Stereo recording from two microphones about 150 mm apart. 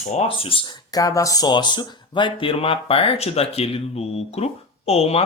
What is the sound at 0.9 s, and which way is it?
Speech, 25° left (ahead or behind).